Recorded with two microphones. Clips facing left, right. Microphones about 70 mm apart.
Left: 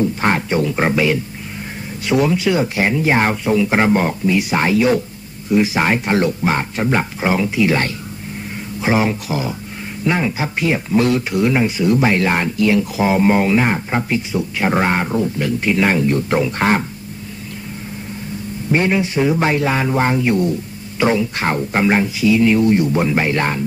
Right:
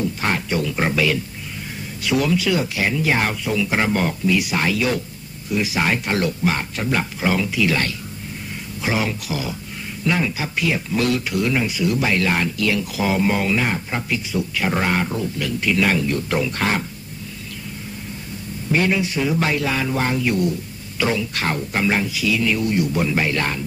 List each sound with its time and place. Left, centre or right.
0.0 s speech: left
18.7 s speech: left